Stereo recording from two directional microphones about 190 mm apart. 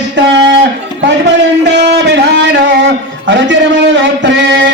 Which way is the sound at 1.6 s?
65° right (ahead or behind).